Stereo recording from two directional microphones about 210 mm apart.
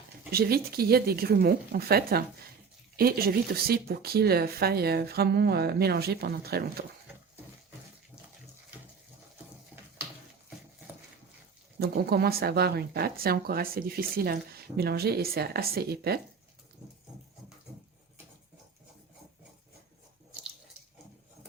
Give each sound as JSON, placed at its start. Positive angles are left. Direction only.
{"t": 0.3, "sound": "speech", "side_deg": -45}
{"t": 11.8, "sound": "speech", "side_deg": -50}